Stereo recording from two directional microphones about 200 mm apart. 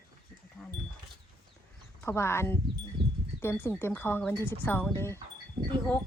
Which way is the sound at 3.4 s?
10° left (ahead or behind).